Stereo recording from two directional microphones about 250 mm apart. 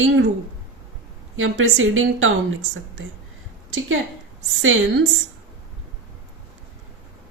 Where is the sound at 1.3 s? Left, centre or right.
Right.